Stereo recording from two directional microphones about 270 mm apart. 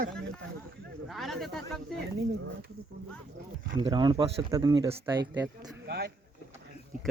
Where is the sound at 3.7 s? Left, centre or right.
Centre.